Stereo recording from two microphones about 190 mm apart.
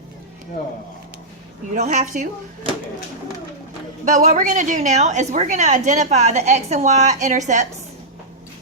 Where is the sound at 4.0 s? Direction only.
40° right (ahead or behind).